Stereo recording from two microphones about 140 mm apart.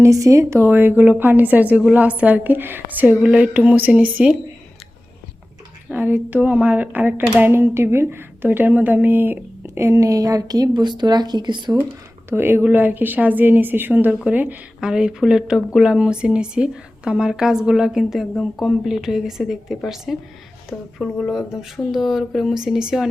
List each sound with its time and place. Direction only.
0.0 s speech: 25° right (ahead or behind)
5.9 s speech: 15° right (ahead or behind); by 11.8 s 30° right (ahead or behind)
12.3 s speech: 15° right (ahead or behind)